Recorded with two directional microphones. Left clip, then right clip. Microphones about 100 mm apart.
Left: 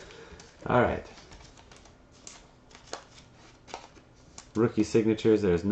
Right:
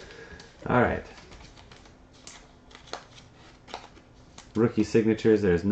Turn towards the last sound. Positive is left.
turn(degrees=15)  # may be behind; listen again after turning